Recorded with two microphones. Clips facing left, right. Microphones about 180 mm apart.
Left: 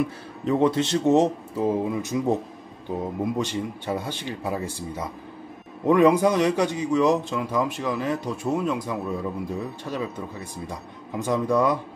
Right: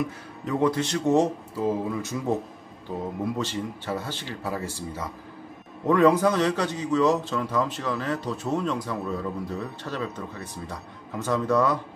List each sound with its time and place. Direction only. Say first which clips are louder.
0.5 s speech: left 3 dB; 25° left (ahead or behind)
3.3 s a man's voice: left 3 dB; 15° left (ahead or behind)